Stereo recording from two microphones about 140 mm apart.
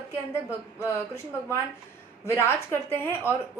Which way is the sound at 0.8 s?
20° left (ahead or behind).